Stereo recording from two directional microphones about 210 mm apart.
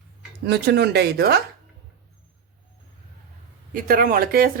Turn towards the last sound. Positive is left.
turn(degrees=-45)  # may be behind; listen again after turning